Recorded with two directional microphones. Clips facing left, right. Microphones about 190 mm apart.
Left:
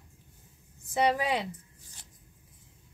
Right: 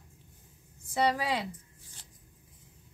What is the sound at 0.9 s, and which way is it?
Speech, 20° left (ahead or behind).